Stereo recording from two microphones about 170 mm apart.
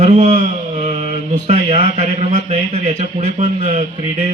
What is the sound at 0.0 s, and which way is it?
Speech, 45° right (ahead or behind).